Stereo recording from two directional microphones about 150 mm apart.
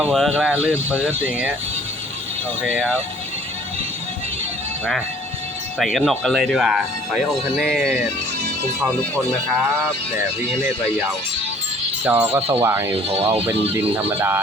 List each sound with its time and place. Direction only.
0.1 s speech: centre (ahead or behind)
2.6 s speech: 5° left (ahead or behind)
5.8 s speech: centre (ahead or behind)
12.0 s speech: 15° right (ahead or behind)
12.4 s speech: 40° right (ahead or behind)
12.6 s speech: 15° right (ahead or behind)
12.9 s speech: 40° right (ahead or behind)
13.7 s speech: 10° right (ahead or behind)